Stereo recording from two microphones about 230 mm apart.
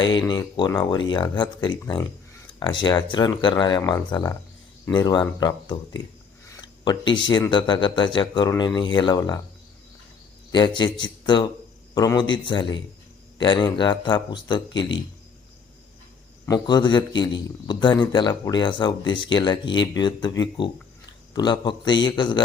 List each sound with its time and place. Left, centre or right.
0.3 s speech: centre
10.5 s speech: centre
16.5 s speech: centre